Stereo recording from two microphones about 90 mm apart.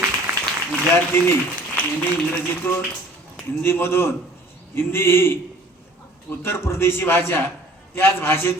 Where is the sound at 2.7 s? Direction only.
25° left (ahead or behind).